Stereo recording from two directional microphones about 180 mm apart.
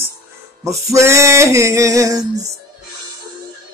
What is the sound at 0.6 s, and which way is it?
Female singing, 15° right (ahead or behind).